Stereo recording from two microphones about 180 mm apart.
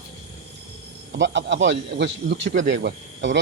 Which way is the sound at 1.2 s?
85° right.